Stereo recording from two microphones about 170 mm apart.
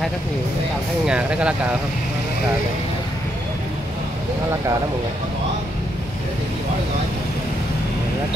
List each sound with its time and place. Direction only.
1.0 s speech: 5° right (ahead or behind)